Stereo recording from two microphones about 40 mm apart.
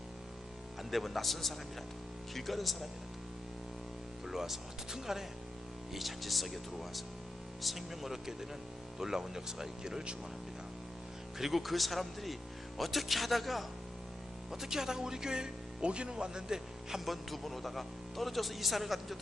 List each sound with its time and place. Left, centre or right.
0.9 s speech: centre
4.3 s speech: centre
11.3 s speech: centre
14.5 s speech: centre
17.1 s speech: centre